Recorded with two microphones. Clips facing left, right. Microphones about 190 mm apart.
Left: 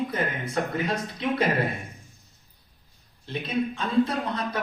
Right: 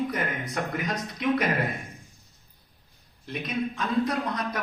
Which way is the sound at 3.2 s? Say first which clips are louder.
Left 2 dB; 30° left (ahead or behind).